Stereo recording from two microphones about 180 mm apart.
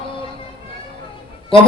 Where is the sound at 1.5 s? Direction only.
30° left (ahead or behind).